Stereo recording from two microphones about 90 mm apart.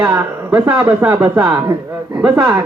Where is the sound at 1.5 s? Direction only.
55° right (ahead or behind).